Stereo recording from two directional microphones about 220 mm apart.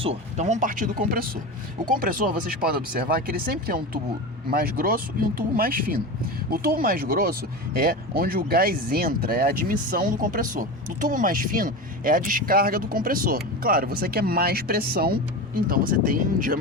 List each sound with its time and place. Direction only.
0.0 s speech: 30° right (ahead or behind)